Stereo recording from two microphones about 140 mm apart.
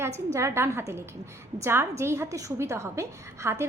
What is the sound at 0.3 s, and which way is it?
A woman's voice, 20° right (ahead or behind).